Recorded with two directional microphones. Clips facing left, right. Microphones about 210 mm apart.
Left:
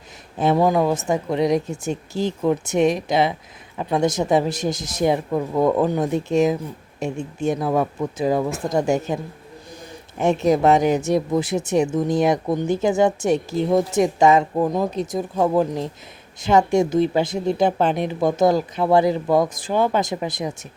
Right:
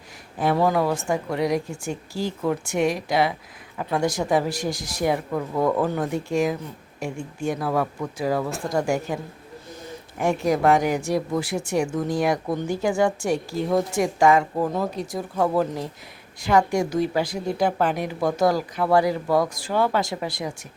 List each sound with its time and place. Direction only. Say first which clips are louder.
0.3 s speech: left 3 dB; 20° left (ahead or behind)